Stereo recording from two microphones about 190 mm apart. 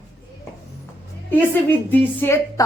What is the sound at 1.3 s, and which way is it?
A woman's voice, 10° left (ahead or behind).